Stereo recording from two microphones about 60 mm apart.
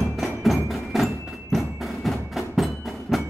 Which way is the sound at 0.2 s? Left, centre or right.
Centre.